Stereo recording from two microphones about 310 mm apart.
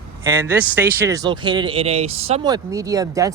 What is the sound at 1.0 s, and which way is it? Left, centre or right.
Speech, centre.